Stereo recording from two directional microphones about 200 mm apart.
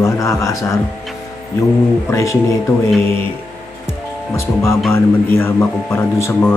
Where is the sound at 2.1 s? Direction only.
15° left (ahead or behind).